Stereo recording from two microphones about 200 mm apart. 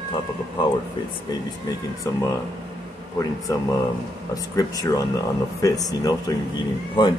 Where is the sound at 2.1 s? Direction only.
15° left (ahead or behind).